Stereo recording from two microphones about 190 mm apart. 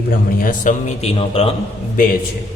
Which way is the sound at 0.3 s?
45° left (ahead or behind).